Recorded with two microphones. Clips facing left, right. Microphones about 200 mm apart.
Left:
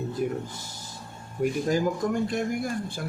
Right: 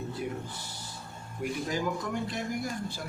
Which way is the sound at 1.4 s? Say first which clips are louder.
Left 8 dB; 45° left (ahead or behind).